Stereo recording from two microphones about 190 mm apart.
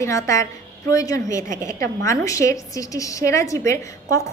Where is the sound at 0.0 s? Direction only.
15° left (ahead or behind).